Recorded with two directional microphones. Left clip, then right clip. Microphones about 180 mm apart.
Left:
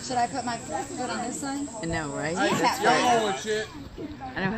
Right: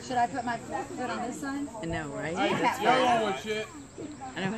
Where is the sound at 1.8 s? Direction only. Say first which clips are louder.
Left 5 dB; 30° left (ahead or behind).